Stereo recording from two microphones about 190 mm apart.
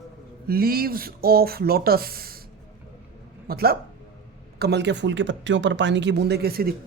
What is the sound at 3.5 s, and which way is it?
Speech, 55° right (ahead or behind).